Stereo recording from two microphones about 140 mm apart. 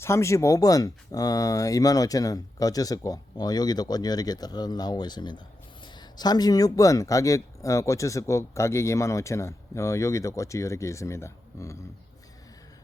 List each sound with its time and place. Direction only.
0.0 s speech: 20° left (ahead or behind)